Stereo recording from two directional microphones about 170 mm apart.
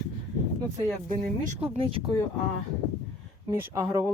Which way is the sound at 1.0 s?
45° right (ahead or behind).